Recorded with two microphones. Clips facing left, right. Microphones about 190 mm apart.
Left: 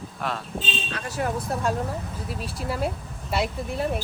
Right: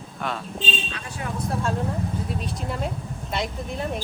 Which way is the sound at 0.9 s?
45° left (ahead or behind).